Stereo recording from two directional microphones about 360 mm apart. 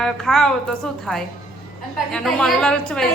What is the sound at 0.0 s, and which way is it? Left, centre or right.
A woman's voice, centre.